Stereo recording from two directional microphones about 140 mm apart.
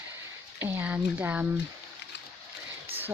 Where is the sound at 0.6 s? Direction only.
15° right (ahead or behind).